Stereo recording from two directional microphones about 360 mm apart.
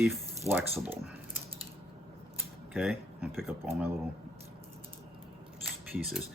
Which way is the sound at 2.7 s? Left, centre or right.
Centre.